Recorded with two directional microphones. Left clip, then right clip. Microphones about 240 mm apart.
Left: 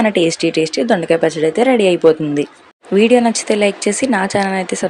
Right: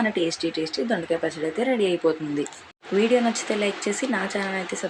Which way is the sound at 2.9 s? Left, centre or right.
Left.